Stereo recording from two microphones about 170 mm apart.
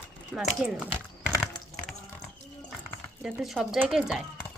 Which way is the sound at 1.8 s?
25° left (ahead or behind).